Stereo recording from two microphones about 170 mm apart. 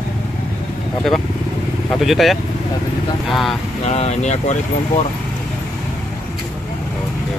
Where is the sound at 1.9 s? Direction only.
Centre (ahead or behind).